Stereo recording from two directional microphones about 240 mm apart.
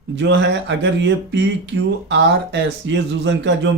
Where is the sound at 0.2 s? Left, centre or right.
Right.